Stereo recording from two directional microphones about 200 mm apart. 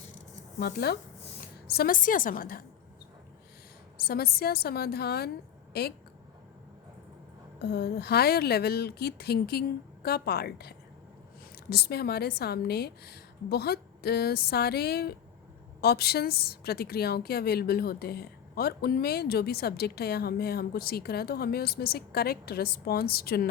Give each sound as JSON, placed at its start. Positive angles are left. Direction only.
{"t": 0.6, "sound": "a woman's voice", "side_deg": 55}
{"t": 3.9, "sound": "a woman's voice", "side_deg": 50}
{"t": 7.6, "sound": "a woman's voice", "side_deg": 55}